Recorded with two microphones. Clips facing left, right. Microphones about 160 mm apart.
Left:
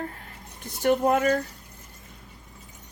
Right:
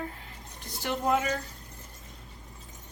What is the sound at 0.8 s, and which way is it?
Speech, 50° left (ahead or behind).